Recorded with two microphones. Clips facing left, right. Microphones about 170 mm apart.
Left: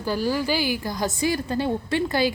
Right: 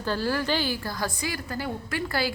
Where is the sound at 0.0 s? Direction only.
10° left (ahead or behind).